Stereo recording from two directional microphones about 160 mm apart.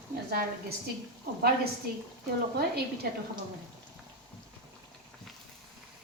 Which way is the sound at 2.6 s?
85° right.